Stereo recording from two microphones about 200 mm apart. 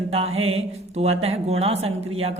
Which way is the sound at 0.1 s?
30° right (ahead or behind).